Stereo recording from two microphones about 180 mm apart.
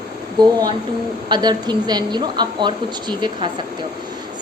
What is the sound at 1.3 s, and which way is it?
A woman's voice, 25° right (ahead or behind).